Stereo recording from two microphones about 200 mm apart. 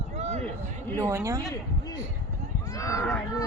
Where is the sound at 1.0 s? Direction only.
15° right (ahead or behind).